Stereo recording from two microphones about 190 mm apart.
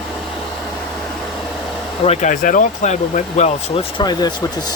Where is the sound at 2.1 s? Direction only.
40° left (ahead or behind).